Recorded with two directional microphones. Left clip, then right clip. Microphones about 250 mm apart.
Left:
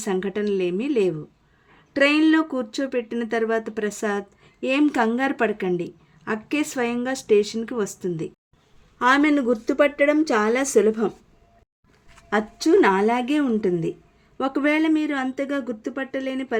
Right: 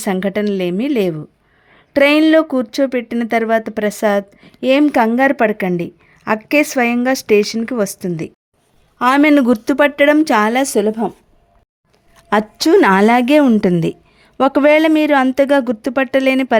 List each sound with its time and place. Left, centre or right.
0.0 s speech: right
12.3 s speech: right